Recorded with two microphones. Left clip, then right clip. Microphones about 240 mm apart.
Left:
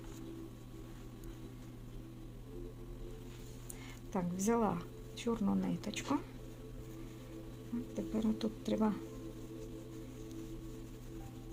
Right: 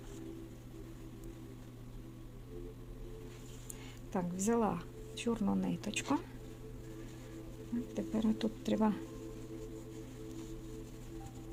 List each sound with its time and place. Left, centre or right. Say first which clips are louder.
4.1 s a woman's voice: even; centre
7.9 s speech: right 1 dB; centre